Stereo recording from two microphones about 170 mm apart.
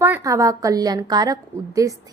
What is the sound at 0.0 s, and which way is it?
Speech, 15° right (ahead or behind).